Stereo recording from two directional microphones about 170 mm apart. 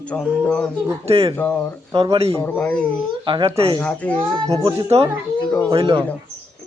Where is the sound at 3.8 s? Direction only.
5° left (ahead or behind).